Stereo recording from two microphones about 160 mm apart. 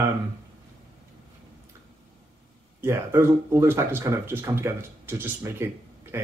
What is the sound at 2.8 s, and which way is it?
Speech, 15° right (ahead or behind).